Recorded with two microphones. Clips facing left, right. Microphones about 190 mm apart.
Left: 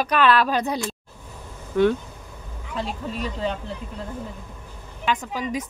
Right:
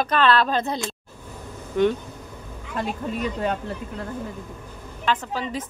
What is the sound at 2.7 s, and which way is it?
Speech, 55° right (ahead or behind).